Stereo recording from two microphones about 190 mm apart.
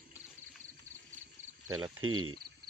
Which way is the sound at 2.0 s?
90° right.